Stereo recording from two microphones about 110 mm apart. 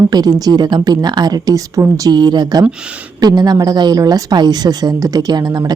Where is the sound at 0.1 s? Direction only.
35° right (ahead or behind).